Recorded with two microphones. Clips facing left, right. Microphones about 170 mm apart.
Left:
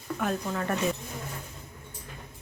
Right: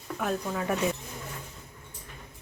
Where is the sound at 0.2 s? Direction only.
5° right (ahead or behind).